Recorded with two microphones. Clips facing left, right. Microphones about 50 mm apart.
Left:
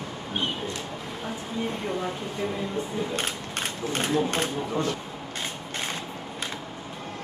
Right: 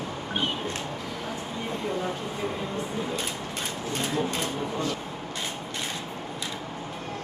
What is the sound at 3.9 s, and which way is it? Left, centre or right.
Speech, left.